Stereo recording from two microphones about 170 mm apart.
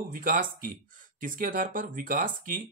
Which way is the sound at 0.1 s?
55° right (ahead or behind).